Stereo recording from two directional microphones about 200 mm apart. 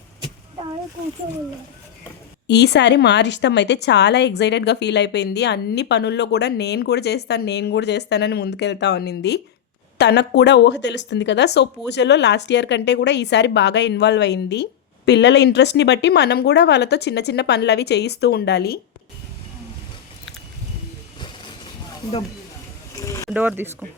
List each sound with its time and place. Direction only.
2.5 s a woman's voice: 60° left (ahead or behind)
21.2 s a sound: 25° left (ahead or behind)
23.0 s pulleys: 15° left (ahead or behind)
23.3 s speech: 10° right (ahead or behind)